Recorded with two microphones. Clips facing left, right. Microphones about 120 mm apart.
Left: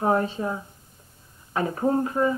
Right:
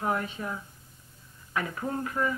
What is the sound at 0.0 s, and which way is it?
A woman's voice, 30° left (ahead or behind).